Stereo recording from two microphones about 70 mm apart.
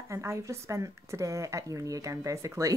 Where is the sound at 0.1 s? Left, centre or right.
Right.